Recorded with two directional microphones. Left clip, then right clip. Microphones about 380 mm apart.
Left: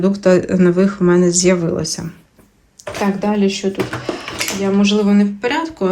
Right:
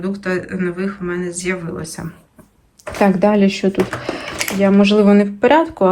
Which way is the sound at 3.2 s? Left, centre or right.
Right.